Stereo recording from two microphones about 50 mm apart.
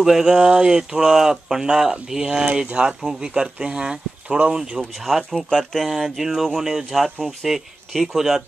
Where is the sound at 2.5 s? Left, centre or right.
Right.